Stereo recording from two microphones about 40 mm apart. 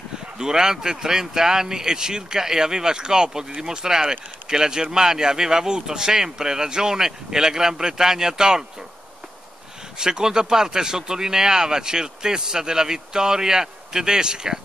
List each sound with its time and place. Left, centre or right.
0.4 s speech: centre
9.9 s speech: centre